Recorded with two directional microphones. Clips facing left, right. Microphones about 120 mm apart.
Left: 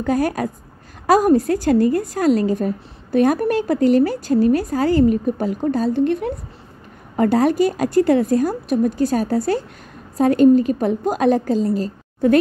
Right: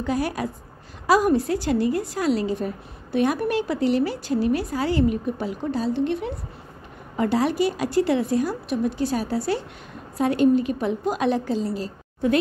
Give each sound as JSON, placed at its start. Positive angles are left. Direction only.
{"t": 0.0, "sound": "a woman's voice", "side_deg": 45}